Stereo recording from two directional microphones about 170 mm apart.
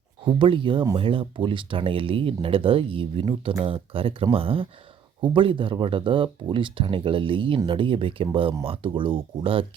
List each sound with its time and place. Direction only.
0.3 s speech: 30° right (ahead or behind)